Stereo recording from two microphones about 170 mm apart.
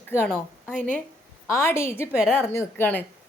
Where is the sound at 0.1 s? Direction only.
10° right (ahead or behind).